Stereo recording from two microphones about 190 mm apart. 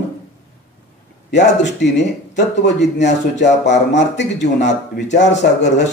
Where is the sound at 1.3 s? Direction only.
65° left (ahead or behind).